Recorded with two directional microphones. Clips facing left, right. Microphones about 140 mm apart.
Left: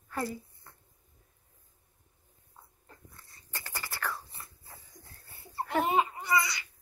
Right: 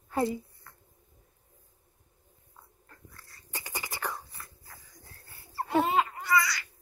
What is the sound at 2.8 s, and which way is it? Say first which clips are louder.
Dog: right 1 dB; 20° left (ahead or behind).